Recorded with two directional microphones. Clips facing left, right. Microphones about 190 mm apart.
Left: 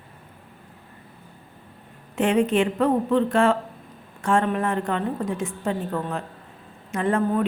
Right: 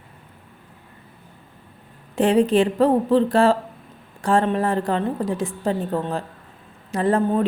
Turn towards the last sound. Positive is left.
turn(degrees=-30)  # may be behind; listen again after turning